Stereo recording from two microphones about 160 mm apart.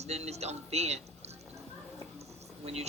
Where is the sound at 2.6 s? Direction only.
40° right (ahead or behind).